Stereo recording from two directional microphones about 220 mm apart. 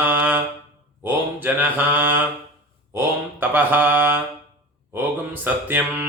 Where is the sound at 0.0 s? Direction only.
10° right (ahead or behind).